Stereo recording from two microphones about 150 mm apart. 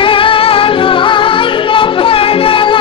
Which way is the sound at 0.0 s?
35° left (ahead or behind).